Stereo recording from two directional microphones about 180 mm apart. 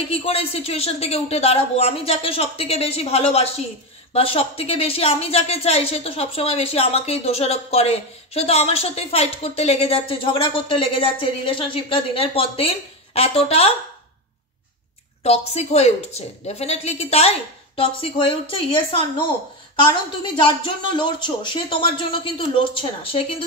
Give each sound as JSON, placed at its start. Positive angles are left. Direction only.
{"t": 0.1, "sound": "speech", "side_deg": 30}
{"t": 15.2, "sound": "a woman's voice", "side_deg": 35}